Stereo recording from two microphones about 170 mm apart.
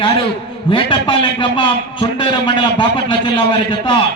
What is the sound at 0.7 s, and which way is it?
A man's voice, 30° left (ahead or behind).